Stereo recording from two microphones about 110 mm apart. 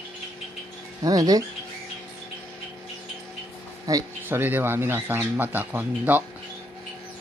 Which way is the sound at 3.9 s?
30° right (ahead or behind).